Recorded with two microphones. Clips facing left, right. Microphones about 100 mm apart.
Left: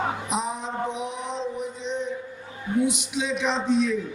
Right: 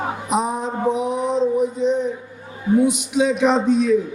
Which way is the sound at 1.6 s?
45° right (ahead or behind).